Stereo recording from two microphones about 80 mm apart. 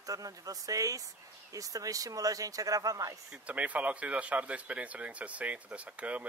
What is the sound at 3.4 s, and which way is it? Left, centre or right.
Speech, centre.